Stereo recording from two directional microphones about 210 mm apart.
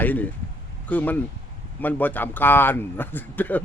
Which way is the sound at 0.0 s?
10° left (ahead or behind).